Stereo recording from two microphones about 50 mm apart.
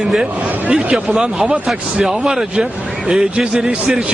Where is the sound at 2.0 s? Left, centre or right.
Centre.